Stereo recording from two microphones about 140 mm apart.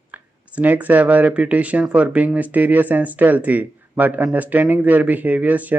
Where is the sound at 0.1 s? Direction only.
10° right (ahead or behind).